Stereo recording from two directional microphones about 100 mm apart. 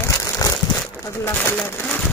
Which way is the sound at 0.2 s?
40° left (ahead or behind).